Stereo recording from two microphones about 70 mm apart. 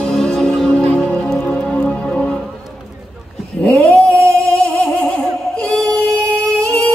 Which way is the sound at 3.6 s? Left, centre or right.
Centre.